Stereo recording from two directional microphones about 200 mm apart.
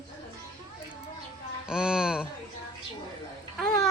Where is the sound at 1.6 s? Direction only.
5° right (ahead or behind).